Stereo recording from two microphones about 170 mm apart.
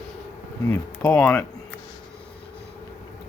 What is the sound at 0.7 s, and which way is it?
Speech, 10° left (ahead or behind).